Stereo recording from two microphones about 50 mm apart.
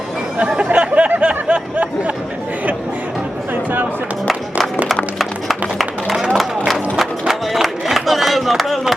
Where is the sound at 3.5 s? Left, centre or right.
Right.